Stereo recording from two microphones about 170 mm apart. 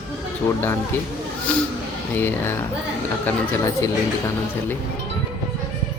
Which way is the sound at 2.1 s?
10° left (ahead or behind).